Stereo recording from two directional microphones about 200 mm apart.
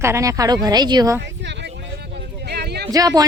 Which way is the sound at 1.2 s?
60° right (ahead or behind).